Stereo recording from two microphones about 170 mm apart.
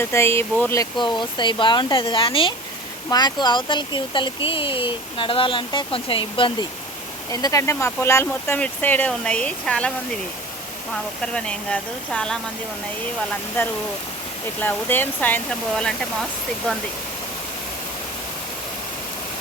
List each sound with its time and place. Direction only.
0.0 s speech: 15° left (ahead or behind)
7.3 s speech: 20° left (ahead or behind)
11.2 s speech: 5° left (ahead or behind)
14.6 s speech: 10° left (ahead or behind)